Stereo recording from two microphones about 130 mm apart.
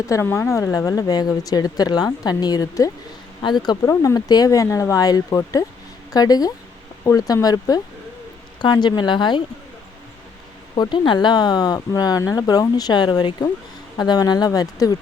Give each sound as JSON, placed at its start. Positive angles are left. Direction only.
{"t": 0.1, "sound": "speech", "side_deg": 20}
{"t": 10.8, "sound": "speech", "side_deg": 40}